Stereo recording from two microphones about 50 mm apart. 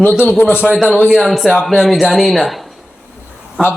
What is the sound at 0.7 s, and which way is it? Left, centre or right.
Speech, centre.